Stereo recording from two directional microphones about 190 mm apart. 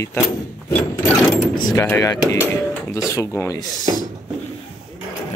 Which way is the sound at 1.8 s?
10° left (ahead or behind).